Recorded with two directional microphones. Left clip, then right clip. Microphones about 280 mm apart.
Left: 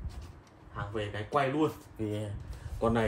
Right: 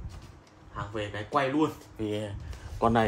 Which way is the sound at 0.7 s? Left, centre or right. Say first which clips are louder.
Right 2 dB; centre.